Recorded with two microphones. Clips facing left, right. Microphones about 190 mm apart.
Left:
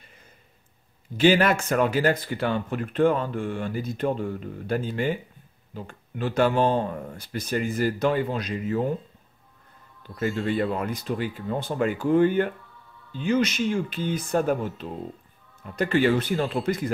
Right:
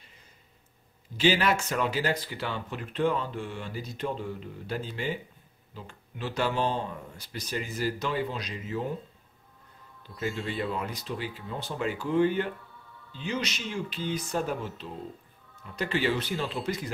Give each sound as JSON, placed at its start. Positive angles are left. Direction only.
{"t": 1.1, "sound": "speech", "side_deg": 50}
{"t": 10.5, "sound": "speech", "side_deg": 55}